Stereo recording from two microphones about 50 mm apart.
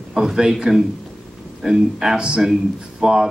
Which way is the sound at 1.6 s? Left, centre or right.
Centre.